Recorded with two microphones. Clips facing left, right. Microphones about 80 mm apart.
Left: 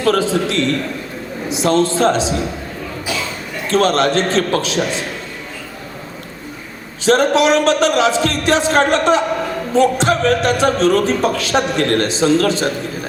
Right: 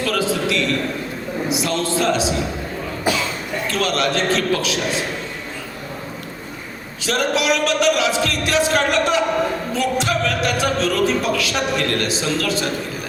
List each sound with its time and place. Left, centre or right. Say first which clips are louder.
0.0 s a man's voice: left 5 dB; left
3.1 s speech: right 4 dB; right
3.7 s a man's voice: left 7 dB; left
7.0 s a man's voice: left 7 dB; left